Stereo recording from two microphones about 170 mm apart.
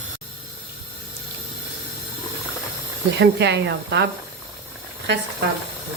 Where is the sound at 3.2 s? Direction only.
90° right.